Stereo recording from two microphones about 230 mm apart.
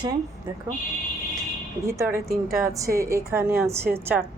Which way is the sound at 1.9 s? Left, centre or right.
Centre.